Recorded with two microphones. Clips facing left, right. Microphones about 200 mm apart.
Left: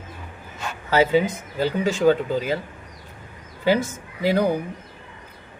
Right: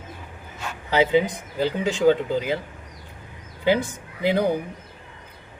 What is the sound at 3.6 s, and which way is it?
Speech, 15° right (ahead or behind).